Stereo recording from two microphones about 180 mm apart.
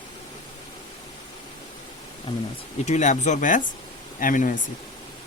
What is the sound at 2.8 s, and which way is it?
Speech, 40° left (ahead or behind).